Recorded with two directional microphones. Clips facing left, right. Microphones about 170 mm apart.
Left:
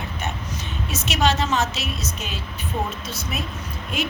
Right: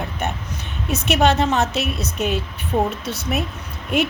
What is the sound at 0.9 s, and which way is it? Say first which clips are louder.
Speech: right 5 dB; 60° right (ahead or behind).